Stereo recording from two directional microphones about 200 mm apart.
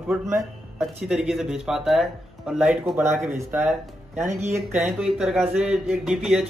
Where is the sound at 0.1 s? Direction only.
15° right (ahead or behind).